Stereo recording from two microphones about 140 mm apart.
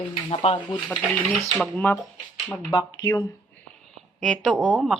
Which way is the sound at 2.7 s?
25° left (ahead or behind).